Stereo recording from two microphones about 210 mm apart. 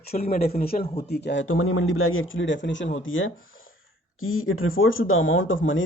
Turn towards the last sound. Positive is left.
turn(degrees=70)  # may be behind; listen again after turning